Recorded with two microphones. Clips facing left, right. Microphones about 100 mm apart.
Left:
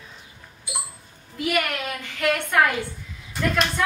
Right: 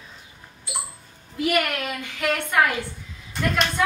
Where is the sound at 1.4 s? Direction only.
Centre (ahead or behind).